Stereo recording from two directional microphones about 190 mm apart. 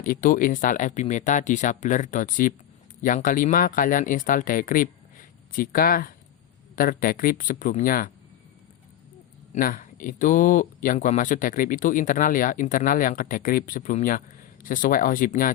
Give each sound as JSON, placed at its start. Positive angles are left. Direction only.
{"t": 0.0, "sound": "speech", "side_deg": 45}
{"t": 9.6, "sound": "speech", "side_deg": 45}